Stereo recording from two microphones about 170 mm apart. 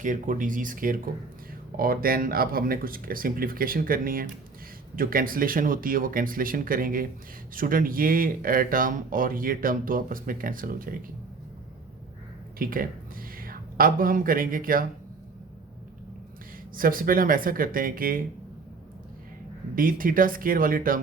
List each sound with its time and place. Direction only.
0.0 s speech: 50° right (ahead or behind)
12.5 s speech: 55° right (ahead or behind)
16.7 s speech: 55° right (ahead or behind)
19.7 s speech: 55° right (ahead or behind)